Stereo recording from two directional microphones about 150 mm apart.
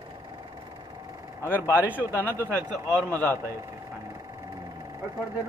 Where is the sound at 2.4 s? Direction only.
10° left (ahead or behind).